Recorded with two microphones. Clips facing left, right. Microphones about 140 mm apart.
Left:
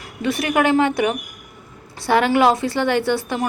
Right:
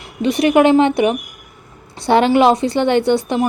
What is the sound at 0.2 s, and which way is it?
A woman's voice, 20° right (ahead or behind).